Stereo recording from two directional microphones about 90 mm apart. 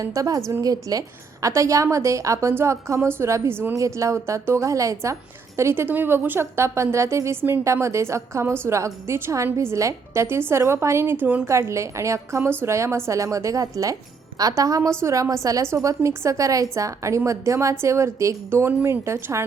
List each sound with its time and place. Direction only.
0.0 s a woman's voice: 40° right (ahead or behind)
3.8 s a woman's voice: 35° right (ahead or behind); by 11.4 s 20° right (ahead or behind)
11.4 s a woman's voice: 35° right (ahead or behind)
14.8 s a woman's voice: 30° right (ahead or behind)